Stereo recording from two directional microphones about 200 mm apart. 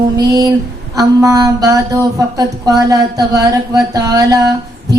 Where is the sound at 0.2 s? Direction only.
20° right (ahead or behind).